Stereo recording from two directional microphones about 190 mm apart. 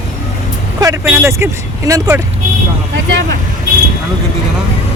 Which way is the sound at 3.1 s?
70° right (ahead or behind).